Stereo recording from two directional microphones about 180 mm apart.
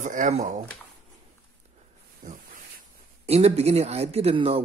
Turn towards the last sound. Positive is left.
turn(degrees=-30)  # may be behind; listen again after turning